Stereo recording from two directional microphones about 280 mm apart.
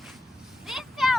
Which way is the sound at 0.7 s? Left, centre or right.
Centre.